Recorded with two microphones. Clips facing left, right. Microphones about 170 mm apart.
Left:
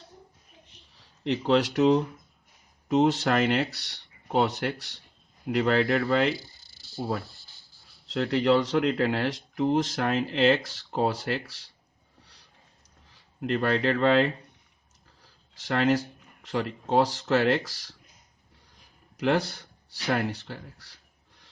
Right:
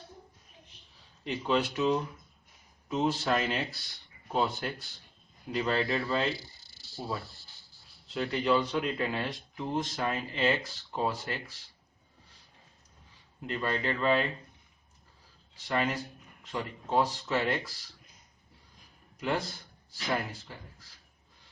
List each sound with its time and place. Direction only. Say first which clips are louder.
1.5 s speech: left 6 dB; 70° left (ahead or behind)
8.0 s speech: left 6 dB; 75° left (ahead or behind)
12.2 s a sound: left 2 dB; 75° left (ahead or behind)
13.1 s speech: left 8 dB; 75° left (ahead or behind)
19.1 s speech: left 7 dB; 75° left (ahead or behind)